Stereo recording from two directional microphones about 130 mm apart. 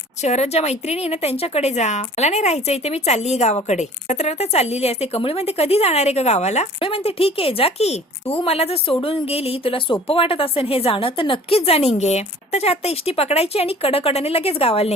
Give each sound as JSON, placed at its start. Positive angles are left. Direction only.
{"t": 0.2, "sound": "speech", "side_deg": 60}
{"t": 6.7, "sound": "a woman's voice", "side_deg": 45}